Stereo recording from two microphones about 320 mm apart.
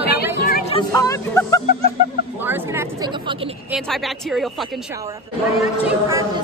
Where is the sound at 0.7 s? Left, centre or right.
Centre.